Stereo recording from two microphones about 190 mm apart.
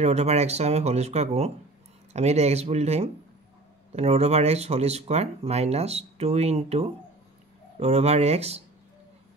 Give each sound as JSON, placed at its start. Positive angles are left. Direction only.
{"t": 0.0, "sound": "speech", "side_deg": -35}